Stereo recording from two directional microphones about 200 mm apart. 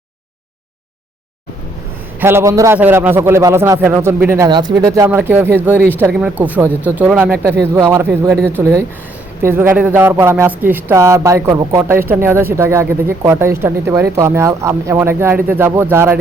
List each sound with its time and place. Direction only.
2.2 s speech: 15° right (ahead or behind)